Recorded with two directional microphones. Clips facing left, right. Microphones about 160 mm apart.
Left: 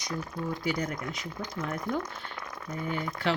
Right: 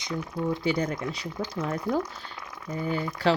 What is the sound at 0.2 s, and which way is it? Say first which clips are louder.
Speech: right 8 dB; 20° right (ahead or behind).